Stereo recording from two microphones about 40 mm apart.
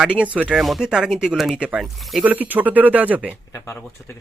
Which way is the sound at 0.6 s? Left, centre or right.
Centre.